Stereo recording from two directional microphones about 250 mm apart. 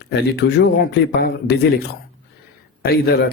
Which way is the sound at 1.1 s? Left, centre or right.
Left.